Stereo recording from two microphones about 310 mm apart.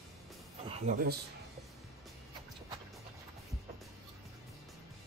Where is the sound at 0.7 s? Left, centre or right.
Right.